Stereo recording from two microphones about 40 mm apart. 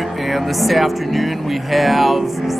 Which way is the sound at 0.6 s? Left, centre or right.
Centre.